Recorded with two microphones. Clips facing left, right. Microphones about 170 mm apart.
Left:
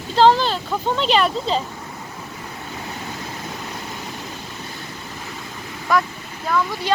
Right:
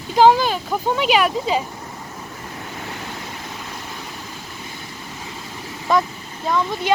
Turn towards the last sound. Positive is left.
turn(degrees=-20)  # may be behind; listen again after turning